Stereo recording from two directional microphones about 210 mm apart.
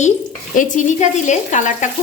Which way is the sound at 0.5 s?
35° left (ahead or behind).